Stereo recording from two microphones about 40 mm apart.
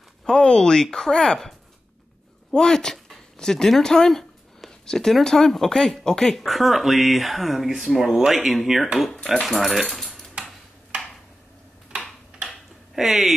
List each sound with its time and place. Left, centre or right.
0.2 s speech: centre
2.5 s speech: centre
6.3 s speech: centre
9.8 s cutlery: centre
12.3 s a sound: centre
12.9 s speech: centre